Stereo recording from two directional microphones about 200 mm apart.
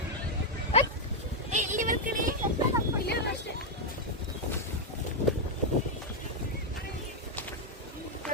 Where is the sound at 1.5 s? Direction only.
40° right (ahead or behind).